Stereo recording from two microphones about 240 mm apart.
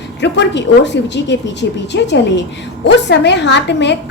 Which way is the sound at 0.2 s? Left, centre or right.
Left.